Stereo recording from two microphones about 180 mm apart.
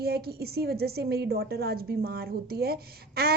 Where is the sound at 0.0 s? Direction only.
60° right (ahead or behind).